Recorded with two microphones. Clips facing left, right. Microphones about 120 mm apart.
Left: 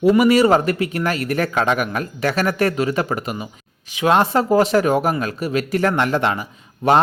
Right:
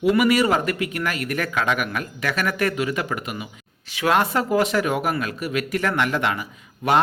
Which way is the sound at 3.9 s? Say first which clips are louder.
Left 4 dB; 20° left (ahead or behind).